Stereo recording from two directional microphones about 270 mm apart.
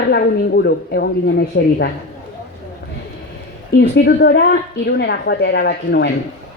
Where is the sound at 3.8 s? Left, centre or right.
Left.